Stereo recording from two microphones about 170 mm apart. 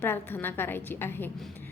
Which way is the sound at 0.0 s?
10° left (ahead or behind).